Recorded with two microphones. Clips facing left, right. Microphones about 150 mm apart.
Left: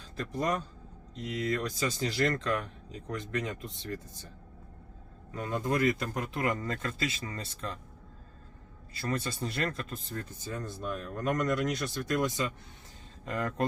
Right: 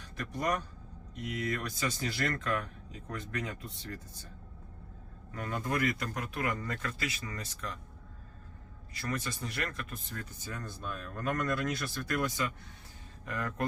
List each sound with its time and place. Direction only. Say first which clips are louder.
0.2 s speech: left 2 dB; 25° left (ahead or behind)
5.3 s speech: left 3 dB; 25° left (ahead or behind)
8.9 s speech: left 3 dB; 30° left (ahead or behind)